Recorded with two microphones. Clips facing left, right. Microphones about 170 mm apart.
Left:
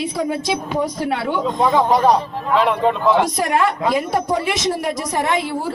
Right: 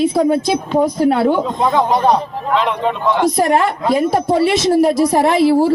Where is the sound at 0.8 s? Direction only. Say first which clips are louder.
Right 8 dB; 50° right (ahead or behind).